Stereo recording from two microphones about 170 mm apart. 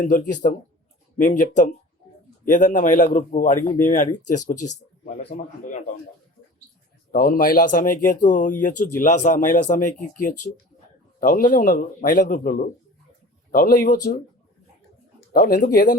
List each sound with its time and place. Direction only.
0.0 s speech: 50° left (ahead or behind)
7.1 s speech: 55° left (ahead or behind)
15.3 s speech: 60° left (ahead or behind)